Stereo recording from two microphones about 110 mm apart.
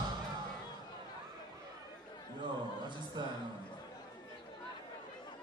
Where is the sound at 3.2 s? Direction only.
40° right (ahead or behind).